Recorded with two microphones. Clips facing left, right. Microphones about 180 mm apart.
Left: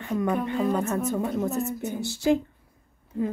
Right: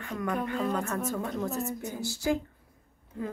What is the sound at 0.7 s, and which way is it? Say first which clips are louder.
Speech: left 5 dB; 20° left (ahead or behind).